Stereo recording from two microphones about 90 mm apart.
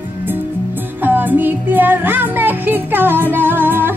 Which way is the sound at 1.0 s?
20° right (ahead or behind).